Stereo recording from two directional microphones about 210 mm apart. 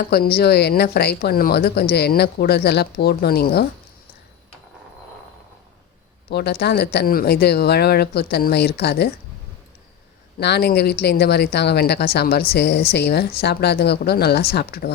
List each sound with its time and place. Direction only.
0.0 s speech: 45° left (ahead or behind)
6.3 s speech: 50° left (ahead or behind)
10.4 s speech: 50° left (ahead or behind)